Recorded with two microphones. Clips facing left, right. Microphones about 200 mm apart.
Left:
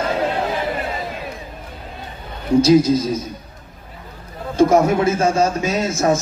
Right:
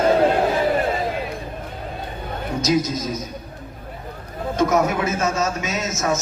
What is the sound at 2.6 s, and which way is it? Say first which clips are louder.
Speech: left 6 dB; 30° left (ahead or behind).